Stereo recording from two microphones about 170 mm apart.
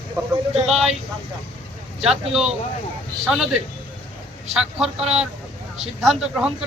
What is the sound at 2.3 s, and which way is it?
Speech, 5° right (ahead or behind).